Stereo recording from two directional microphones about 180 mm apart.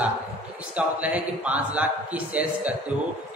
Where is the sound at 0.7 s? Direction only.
10° right (ahead or behind).